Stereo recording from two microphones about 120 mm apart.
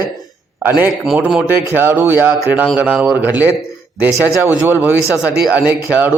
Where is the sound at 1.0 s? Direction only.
5° right (ahead or behind).